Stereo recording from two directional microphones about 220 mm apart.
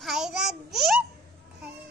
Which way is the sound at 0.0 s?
Centre (ahead or behind).